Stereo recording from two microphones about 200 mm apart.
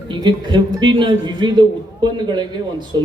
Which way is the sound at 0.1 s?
20° right (ahead or behind).